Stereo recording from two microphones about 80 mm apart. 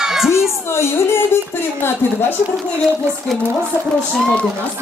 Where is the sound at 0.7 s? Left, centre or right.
Left.